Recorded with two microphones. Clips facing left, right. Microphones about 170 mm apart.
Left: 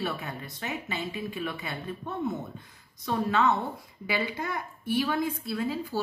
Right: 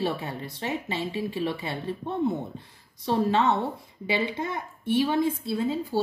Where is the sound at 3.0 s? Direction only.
30° right (ahead or behind).